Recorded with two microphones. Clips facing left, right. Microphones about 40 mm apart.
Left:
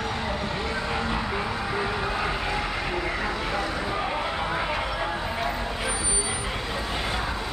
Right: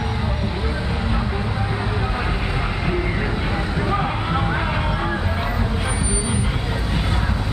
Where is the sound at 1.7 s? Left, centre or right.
Centre.